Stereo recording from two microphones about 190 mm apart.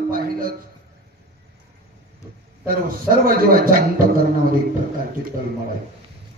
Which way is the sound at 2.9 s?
50° right (ahead or behind).